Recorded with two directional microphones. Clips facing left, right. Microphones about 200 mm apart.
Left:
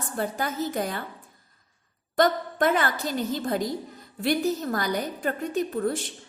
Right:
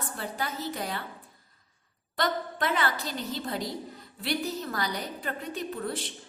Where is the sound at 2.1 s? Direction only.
45° left (ahead or behind).